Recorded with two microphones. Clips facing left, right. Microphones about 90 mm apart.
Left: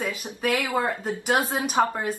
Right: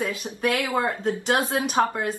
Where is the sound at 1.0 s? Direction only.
10° left (ahead or behind).